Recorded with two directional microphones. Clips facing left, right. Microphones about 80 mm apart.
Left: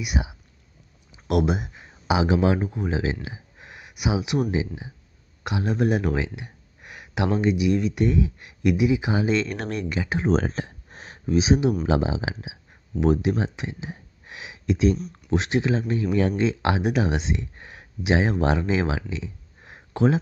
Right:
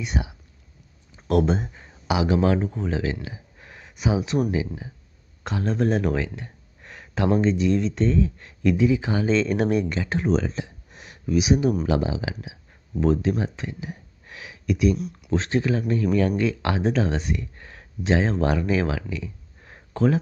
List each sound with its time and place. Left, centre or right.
0.0 s speech: centre
2.0 s speech: left; by 9.9 s centre
9.9 s speech: centre
10.2 s speech: left
15.0 s speech: centre
15.3 s speech: centre